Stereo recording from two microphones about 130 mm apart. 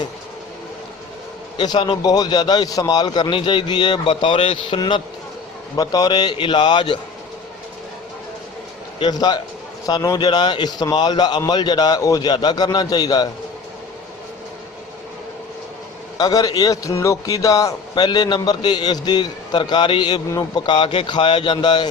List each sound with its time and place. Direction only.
1.5 s a man's voice: 35° left (ahead or behind)
9.0 s a man's voice: 35° left (ahead or behind)
16.1 s a man's voice: 30° left (ahead or behind)